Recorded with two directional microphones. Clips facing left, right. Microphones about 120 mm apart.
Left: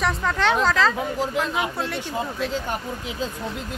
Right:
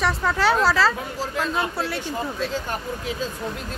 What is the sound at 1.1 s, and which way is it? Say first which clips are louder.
Speech: left 1 dB; 15° left (ahead or behind).